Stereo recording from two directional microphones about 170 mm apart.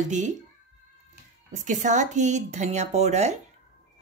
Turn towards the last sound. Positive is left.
turn(degrees=-40)  # may be behind; listen again after turning